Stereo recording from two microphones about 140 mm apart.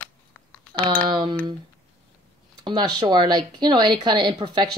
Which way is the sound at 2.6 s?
30° right (ahead or behind).